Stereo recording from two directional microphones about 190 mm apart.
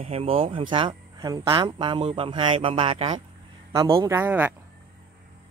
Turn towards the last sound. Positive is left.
turn(degrees=-10)  # may be behind; listen again after turning